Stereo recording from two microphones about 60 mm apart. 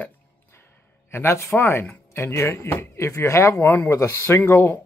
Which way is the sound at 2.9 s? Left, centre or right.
Left.